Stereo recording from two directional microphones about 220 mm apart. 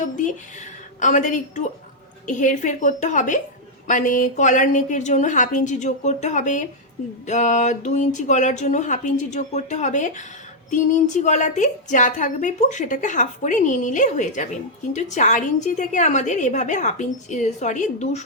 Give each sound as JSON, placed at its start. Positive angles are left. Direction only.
{"t": 0.9, "sound": "a woman's voice", "side_deg": 35}